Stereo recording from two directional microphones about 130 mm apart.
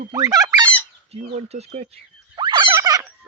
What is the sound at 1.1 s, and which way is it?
Speech, 55° right (ahead or behind).